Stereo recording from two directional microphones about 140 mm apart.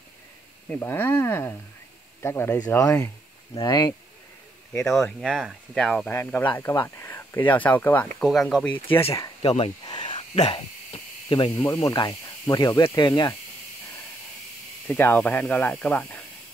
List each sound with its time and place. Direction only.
0.7 s speech: 15° left (ahead or behind)
2.8 s speech: 25° left (ahead or behind)
4.9 s speech: centre (ahead or behind)
6.0 s speech: 10° left (ahead or behind)
8.2 s speech: centre (ahead or behind)
9.4 s speech: 40° left (ahead or behind)
9.8 s a sound: 35° left (ahead or behind)
10.3 s a sound: 45° left (ahead or behind)
11.6 s speech: 25° left (ahead or behind)
14.9 s speech: 15° left (ahead or behind)